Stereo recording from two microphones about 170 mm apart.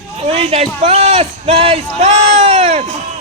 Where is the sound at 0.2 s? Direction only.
35° right (ahead or behind).